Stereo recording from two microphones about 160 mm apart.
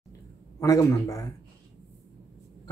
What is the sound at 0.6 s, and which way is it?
Speech, 20° left (ahead or behind).